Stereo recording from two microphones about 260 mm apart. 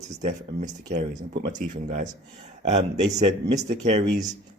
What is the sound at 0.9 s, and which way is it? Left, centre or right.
Speech, right.